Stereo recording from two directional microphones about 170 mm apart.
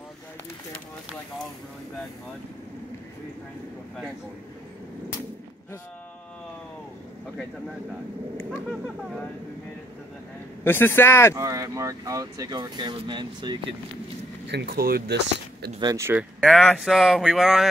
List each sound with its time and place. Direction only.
8.4 s speech: centre (ahead or behind)
10.6 s a man's voice: 15° left (ahead or behind)
11.3 s speech: 20° right (ahead or behind)
14.5 s speech: 75° right (ahead or behind)
15.8 s speech: 20° right (ahead or behind); by 17.6 s centre (ahead or behind)